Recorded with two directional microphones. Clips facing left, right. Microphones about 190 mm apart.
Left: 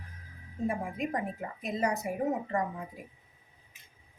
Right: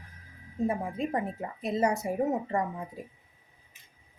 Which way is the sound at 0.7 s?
30° right (ahead or behind).